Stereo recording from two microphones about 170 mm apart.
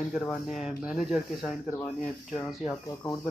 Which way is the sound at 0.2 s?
Centre (ahead or behind).